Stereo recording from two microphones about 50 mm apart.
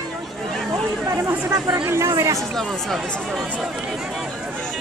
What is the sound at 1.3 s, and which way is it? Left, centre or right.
Speech, right.